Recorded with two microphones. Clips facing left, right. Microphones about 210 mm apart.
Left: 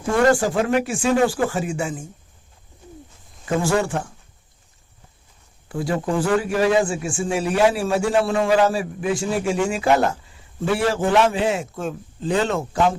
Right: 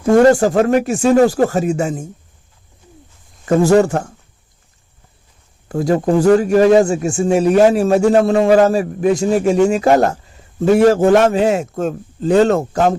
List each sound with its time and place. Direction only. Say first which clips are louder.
0.0 s a man's voice: right 7 dB; 40° right (ahead or behind)
3.5 s speech: right 9 dB; 40° right (ahead or behind)
5.6 s a man's voice: right 8 dB; 45° right (ahead or behind)